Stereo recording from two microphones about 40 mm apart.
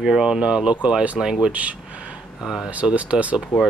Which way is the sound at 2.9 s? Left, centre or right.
Right.